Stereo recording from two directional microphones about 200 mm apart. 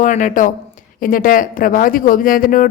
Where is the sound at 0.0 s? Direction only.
40° left (ahead or behind).